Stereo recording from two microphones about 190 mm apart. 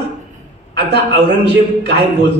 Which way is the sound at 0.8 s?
60° right (ahead or behind).